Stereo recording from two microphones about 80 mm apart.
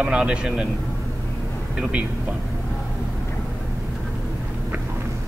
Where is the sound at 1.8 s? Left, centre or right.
Centre.